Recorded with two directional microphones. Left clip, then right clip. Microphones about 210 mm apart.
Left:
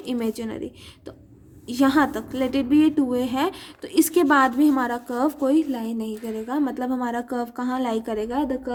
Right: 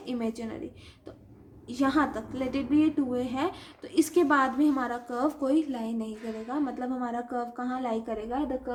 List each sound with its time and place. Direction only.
0.0 s a woman's voice: 45° left (ahead or behind)
1.6 s a woman's voice: 45° left (ahead or behind)